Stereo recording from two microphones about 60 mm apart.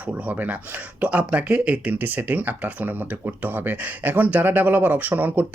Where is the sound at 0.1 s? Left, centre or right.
Right.